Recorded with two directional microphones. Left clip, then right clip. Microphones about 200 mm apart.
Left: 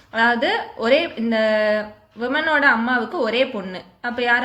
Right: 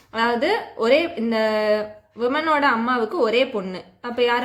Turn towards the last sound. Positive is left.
turn(degrees=-30)  # may be behind; listen again after turning